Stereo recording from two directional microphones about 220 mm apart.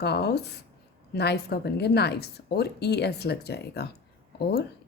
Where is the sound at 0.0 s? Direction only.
50° left (ahead or behind).